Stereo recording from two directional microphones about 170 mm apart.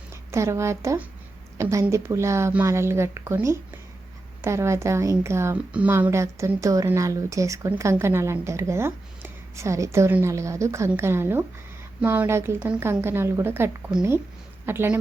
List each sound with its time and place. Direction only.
0.3 s a woman's voice: 15° right (ahead or behind)